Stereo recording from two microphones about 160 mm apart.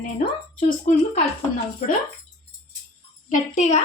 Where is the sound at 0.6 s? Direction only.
55° left (ahead or behind).